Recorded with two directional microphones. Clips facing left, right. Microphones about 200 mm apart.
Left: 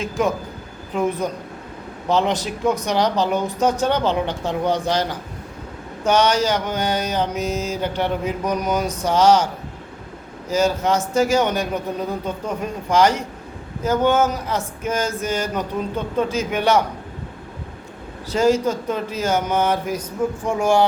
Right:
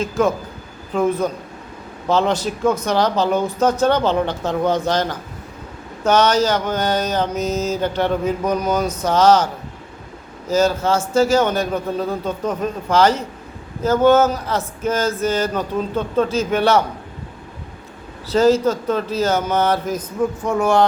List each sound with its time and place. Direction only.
0.0 s speech: 15° left (ahead or behind)
10.5 s speech: 15° left (ahead or behind)
18.3 s speech: 15° left (ahead or behind)